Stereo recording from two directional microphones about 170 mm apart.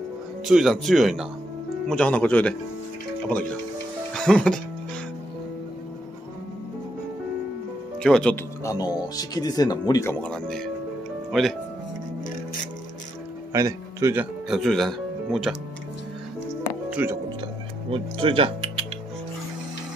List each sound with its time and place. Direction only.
0.5 s speech: centre (ahead or behind)
8.0 s speech: 5° left (ahead or behind)
8.6 s speech: 25° left (ahead or behind)
10.2 s speech: 5° left (ahead or behind)
13.5 s a man's voice: 20° right (ahead or behind)
14.5 s speech: centre (ahead or behind)
16.9 s speech: 10° right (ahead or behind)
17.8 s speech: 35° right (ahead or behind)